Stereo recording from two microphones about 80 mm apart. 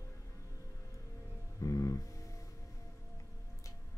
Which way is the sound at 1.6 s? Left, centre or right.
Left.